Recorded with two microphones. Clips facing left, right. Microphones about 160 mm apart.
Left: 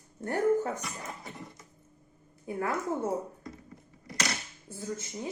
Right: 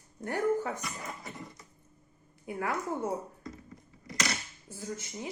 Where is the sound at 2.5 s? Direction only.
30° left (ahead or behind).